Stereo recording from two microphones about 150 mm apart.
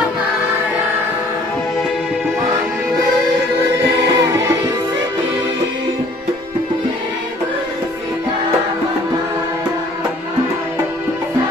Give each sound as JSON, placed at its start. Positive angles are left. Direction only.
{"t": 4.1, "sound": "music", "side_deg": -20}